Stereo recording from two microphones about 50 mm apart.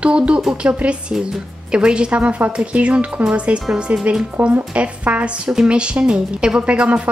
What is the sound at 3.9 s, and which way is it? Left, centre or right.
A woman's voice, right.